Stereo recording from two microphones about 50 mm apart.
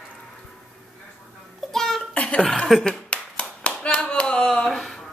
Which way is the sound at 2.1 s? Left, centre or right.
Left.